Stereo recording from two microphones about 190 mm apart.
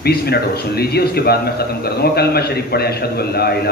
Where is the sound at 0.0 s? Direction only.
55° left (ahead or behind).